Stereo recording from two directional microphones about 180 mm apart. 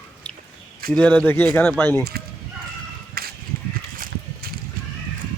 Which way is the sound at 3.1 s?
55° right (ahead or behind).